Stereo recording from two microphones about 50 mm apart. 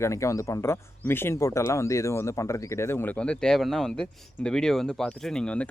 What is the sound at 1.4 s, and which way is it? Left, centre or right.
Speech, left.